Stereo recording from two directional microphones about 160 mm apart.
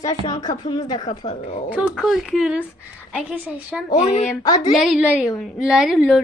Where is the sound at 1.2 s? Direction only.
40° left (ahead or behind).